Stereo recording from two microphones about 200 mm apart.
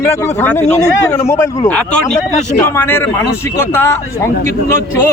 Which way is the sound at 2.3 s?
35° left (ahead or behind).